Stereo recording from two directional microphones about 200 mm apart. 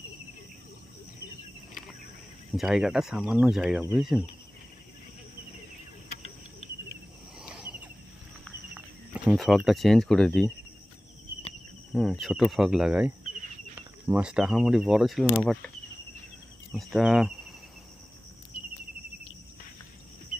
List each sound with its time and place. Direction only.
2.5 s speech: centre (ahead or behind)
7.3 s a sound: 5° right (ahead or behind)
8.7 s cricket: 5° right (ahead or behind)
9.7 s speech: centre (ahead or behind)
11.9 s speech: centre (ahead or behind)
16.7 s speech: centre (ahead or behind)